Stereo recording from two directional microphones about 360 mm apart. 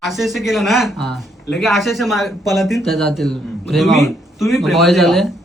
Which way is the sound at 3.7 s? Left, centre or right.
Centre.